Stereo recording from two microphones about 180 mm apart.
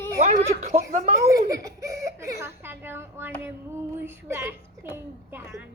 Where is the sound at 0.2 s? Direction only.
40° right (ahead or behind).